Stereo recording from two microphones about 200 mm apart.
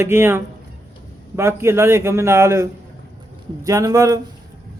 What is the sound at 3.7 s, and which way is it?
Speech, 15° right (ahead or behind).